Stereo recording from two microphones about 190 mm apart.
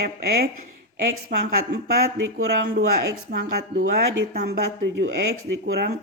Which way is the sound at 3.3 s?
50° right (ahead or behind).